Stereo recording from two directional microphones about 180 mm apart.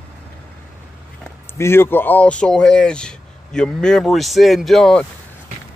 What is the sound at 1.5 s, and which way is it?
Speech, 15° left (ahead or behind).